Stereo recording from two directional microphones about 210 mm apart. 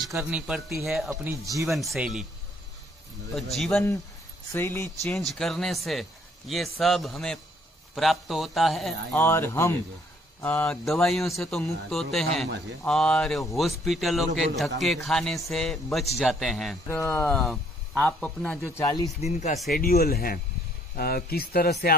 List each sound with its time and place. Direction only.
0.1 s speech: 5° right (ahead or behind)
3.3 s speech: centre (ahead or behind)
16.8 s speech: 10° left (ahead or behind)
19.2 s speech: 35° left (ahead or behind)
19.7 s speech: 45° left (ahead or behind)